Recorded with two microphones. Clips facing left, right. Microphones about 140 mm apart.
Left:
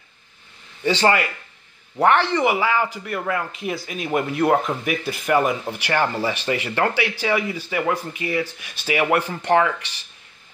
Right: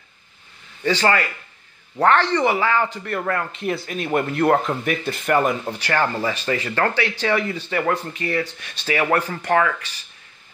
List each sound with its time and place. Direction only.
0.8 s a man's voice: 20° left (ahead or behind)
5.8 s a man's voice: 15° left (ahead or behind)